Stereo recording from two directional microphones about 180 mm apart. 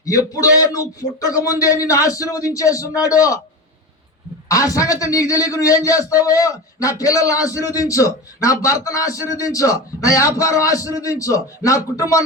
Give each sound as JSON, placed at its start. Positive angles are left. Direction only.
{"t": 0.0, "sound": "a man's voice", "side_deg": 20}
{"t": 4.4, "sound": "a man's voice", "side_deg": 20}